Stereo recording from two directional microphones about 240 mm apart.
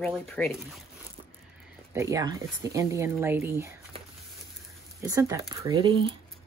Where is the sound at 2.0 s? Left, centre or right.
Centre.